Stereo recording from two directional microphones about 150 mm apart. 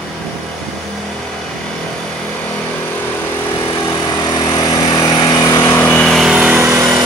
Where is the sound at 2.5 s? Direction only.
10° left (ahead or behind).